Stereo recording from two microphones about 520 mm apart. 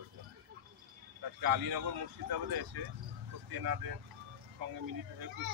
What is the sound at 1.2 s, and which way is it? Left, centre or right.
Speech, right.